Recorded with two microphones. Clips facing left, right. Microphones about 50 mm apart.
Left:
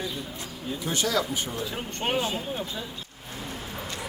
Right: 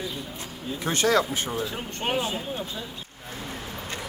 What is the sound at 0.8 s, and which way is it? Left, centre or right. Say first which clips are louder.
Speech: right 5 dB; right.